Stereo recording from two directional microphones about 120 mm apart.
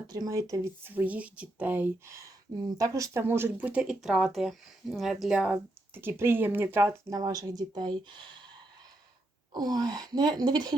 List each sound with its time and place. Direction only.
0.1 s speech: 30° right (ahead or behind); by 5.5 s 5° right (ahead or behind)
5.9 s speech: 15° right (ahead or behind)
7.1 s speech: 30° right (ahead or behind)
9.5 s speech: 35° right (ahead or behind)